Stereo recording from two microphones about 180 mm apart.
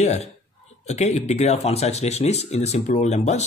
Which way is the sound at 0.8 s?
40° left (ahead or behind).